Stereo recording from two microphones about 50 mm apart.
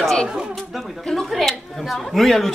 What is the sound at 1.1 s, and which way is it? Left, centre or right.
Speech, centre.